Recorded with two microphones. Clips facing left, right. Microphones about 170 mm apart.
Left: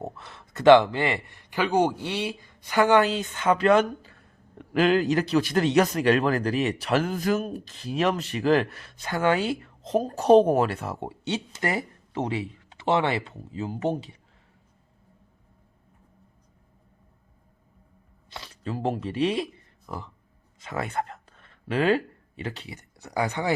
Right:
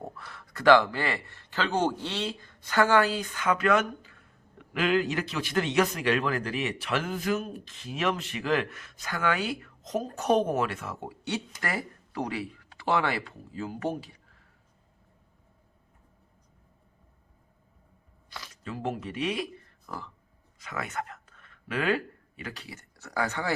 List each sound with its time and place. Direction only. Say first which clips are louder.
0.0 s speech: left 4 dB; 25° left (ahead or behind)
18.3 s speech: left 5 dB; 30° left (ahead or behind)
20.6 s speech: left 5 dB; 30° left (ahead or behind)